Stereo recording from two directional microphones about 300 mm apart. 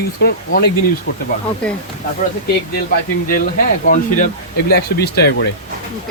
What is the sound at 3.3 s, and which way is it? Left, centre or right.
Speech, left.